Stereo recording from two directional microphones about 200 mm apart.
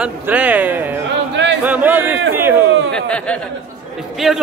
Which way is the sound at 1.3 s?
65° right (ahead or behind).